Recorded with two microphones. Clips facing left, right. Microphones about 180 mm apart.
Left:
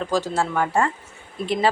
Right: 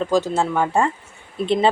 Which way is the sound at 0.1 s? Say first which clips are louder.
Right 2 dB; 20° right (ahead or behind).